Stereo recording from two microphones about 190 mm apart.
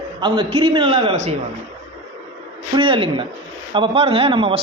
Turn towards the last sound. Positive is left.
turn(degrees=-30)  # may be behind; listen again after turning